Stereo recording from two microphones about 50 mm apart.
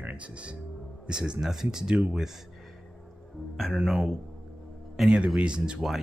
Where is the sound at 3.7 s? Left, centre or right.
Centre.